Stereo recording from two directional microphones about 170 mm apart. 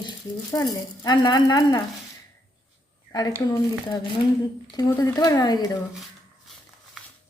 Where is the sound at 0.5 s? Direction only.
20° left (ahead or behind).